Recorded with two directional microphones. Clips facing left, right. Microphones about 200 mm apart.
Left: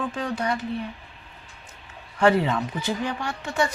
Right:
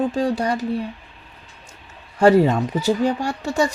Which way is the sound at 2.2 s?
40° right (ahead or behind).